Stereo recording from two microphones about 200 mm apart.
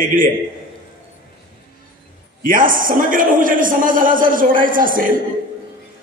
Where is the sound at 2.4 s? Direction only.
45° right (ahead or behind).